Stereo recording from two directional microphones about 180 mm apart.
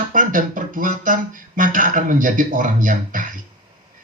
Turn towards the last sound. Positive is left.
turn(degrees=-45)  # may be behind; listen again after turning